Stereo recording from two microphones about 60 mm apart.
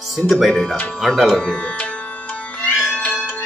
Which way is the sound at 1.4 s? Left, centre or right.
Centre.